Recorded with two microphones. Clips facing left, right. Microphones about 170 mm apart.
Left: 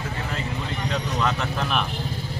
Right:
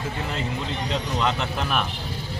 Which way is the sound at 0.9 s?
25° right (ahead or behind).